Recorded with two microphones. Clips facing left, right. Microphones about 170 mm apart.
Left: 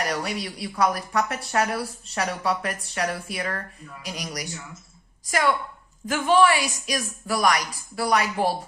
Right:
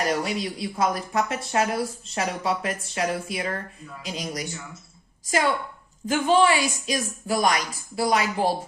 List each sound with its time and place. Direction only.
0.1 s speech: 20° right (ahead or behind)
6.1 s speech: 25° right (ahead or behind)